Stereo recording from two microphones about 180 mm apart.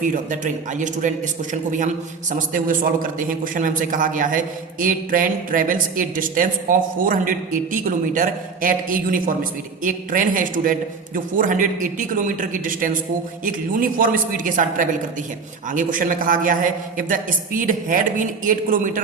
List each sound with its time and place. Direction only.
0.0 s a man's voice: 45° right (ahead or behind)
2.5 s a man's voice: 50° right (ahead or behind)